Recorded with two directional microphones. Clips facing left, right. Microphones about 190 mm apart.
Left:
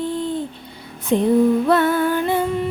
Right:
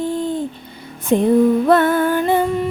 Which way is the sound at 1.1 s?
50° right (ahead or behind).